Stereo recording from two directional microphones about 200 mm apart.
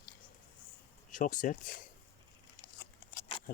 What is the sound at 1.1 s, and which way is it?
Speech, 40° left (ahead or behind).